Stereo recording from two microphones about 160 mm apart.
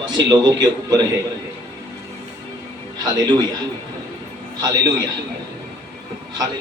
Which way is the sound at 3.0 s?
25° right (ahead or behind).